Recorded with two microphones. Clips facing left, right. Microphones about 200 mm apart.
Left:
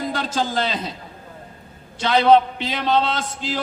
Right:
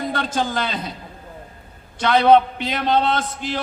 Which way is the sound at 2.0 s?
50° right (ahead or behind).